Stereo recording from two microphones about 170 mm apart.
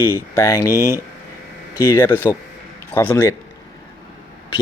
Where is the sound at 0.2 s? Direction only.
15° left (ahead or behind).